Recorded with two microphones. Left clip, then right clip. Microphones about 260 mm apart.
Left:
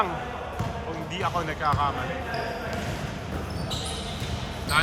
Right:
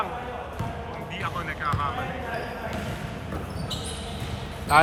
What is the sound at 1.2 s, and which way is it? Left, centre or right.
Speech, centre.